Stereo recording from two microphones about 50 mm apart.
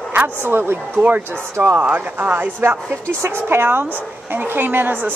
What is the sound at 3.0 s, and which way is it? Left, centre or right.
Speech, right.